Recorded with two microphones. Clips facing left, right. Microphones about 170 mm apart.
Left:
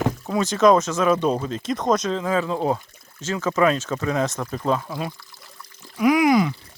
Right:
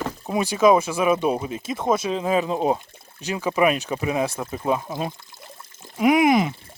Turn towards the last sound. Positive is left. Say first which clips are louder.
# even
turn(degrees=-25)  # may be behind; listen again after turning